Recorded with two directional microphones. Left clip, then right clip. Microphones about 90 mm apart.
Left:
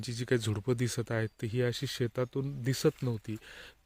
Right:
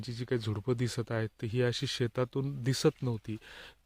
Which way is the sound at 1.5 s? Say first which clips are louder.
Right 3 dB; 20° right (ahead or behind).